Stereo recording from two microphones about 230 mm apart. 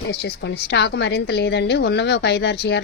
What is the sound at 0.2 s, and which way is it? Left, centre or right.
A woman's voice, left.